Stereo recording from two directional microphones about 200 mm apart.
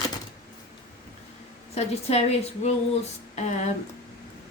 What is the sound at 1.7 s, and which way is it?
A woman's voice, 35° left (ahead or behind).